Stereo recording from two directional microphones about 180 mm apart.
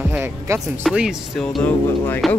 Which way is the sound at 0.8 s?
Centre (ahead or behind).